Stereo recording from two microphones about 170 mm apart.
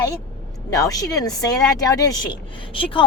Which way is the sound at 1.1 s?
20° left (ahead or behind).